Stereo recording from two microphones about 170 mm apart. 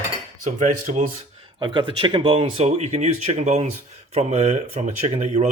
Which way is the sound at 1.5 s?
30° right (ahead or behind).